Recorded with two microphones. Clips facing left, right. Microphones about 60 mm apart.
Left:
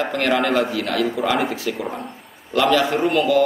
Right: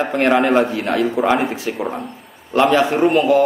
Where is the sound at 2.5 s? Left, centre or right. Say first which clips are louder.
Right 3 dB; right.